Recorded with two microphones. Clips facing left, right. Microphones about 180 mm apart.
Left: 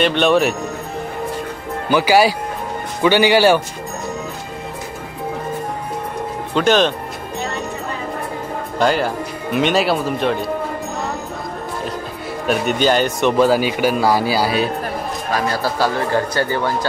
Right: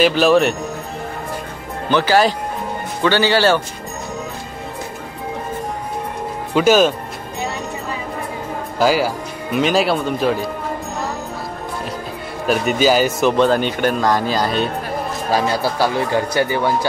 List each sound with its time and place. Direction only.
0.0 s speech: 5° right (ahead or behind)
1.9 s speech: 10° left (ahead or behind)
6.5 s speech: 5° right (ahead or behind)
8.7 s speech: 5° right (ahead or behind)
12.4 s speech: 5° right (ahead or behind)
13.4 s speech: 5° left (ahead or behind)
15.3 s speech: 30° right (ahead or behind)
15.8 s speech: 15° right (ahead or behind)